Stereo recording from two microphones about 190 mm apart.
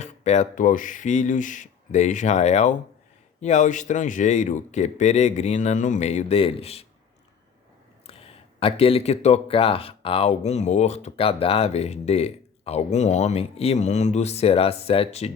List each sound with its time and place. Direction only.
0.0 s speech: 35° left (ahead or behind)
8.0 s speech: 30° left (ahead or behind)